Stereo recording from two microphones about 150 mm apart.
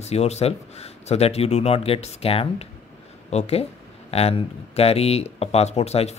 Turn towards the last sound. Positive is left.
turn(degrees=45)  # may be behind; listen again after turning